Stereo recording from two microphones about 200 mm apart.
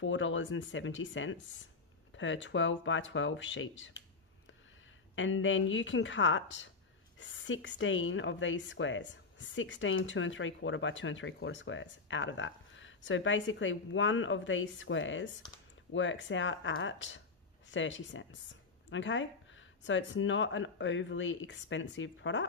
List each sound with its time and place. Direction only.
0.0 s speech: 70° left (ahead or behind)
5.1 s speech: 70° left (ahead or behind)